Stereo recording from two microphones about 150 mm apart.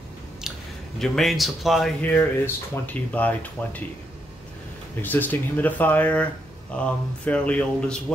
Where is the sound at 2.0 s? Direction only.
15° left (ahead or behind).